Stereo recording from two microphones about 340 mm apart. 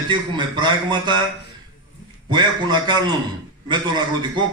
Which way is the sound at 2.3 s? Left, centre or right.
Centre.